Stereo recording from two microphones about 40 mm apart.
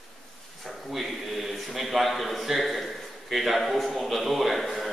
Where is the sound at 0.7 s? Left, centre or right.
Centre.